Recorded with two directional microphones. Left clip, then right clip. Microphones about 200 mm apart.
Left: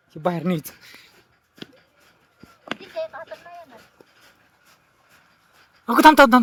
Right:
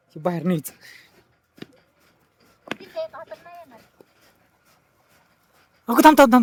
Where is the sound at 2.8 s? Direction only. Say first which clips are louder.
Left 1 dB; 20° right (ahead or behind).